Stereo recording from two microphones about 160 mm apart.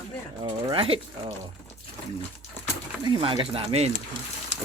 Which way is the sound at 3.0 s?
30° right (ahead or behind).